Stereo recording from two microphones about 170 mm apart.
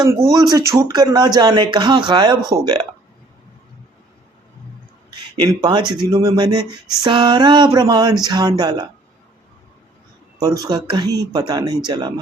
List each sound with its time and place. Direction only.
0.0 s speech: 20° right (ahead or behind)
5.5 s speech: 25° right (ahead or behind)
10.6 s speech: 25° right (ahead or behind)